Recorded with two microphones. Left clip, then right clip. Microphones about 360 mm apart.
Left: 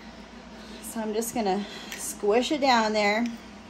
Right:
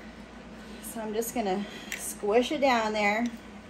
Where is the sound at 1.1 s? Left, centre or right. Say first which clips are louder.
Left 2 dB; left.